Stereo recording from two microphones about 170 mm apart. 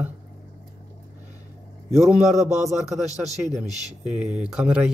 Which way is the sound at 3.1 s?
20° left (ahead or behind).